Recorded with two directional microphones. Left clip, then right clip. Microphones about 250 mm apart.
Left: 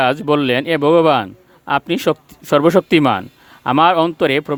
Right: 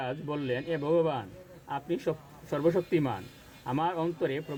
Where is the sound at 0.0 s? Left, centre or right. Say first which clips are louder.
Left 19 dB; left.